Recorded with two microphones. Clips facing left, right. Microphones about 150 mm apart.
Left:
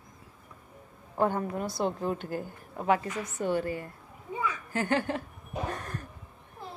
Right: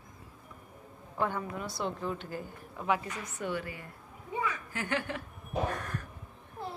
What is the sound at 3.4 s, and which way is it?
A woman's voice, 40° left (ahead or behind).